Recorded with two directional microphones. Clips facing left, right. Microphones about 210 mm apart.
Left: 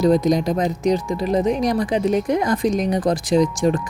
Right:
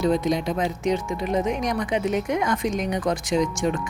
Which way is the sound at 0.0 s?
40° left (ahead or behind).